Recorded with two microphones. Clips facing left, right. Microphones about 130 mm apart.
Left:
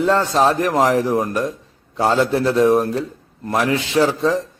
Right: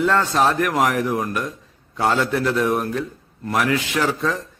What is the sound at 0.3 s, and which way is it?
Speech, 30° left (ahead or behind).